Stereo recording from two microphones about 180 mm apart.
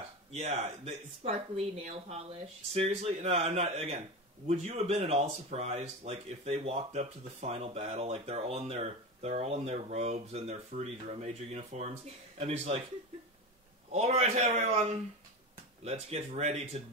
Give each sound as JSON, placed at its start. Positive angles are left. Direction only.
{"t": 0.3, "sound": "speech", "side_deg": -35}
{"t": 13.9, "sound": "speech", "side_deg": -35}